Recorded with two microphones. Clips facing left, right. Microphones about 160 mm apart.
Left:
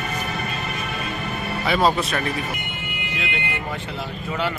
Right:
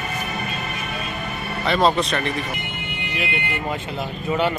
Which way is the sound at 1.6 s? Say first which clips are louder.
Right 1 dB; 5° left (ahead or behind).